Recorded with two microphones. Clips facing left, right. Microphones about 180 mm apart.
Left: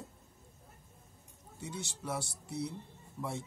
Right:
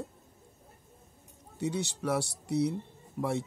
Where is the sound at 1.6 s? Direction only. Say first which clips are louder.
Right 10 dB; 70° right (ahead or behind).